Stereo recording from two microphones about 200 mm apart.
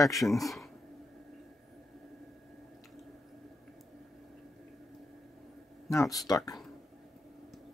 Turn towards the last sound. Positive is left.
turn(degrees=20)  # may be behind; listen again after turning